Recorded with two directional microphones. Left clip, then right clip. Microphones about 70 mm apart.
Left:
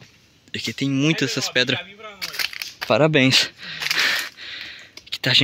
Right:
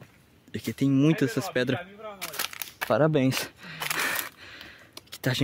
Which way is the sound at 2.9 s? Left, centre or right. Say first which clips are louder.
Left 7 dB; left.